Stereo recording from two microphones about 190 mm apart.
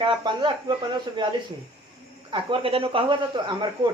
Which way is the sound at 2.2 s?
30° right (ahead or behind).